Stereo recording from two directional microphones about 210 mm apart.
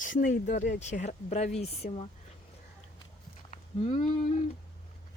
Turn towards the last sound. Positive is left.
turn(degrees=35)  # may be behind; listen again after turning